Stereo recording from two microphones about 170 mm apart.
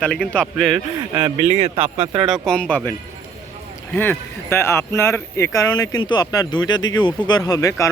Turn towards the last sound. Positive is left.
turn(degrees=20)  # may be behind; listen again after turning